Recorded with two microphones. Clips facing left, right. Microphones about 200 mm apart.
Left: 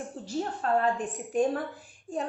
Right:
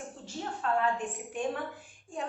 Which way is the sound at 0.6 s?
40° left (ahead or behind).